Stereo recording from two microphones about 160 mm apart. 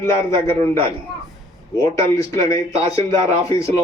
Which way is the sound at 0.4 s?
15° left (ahead or behind).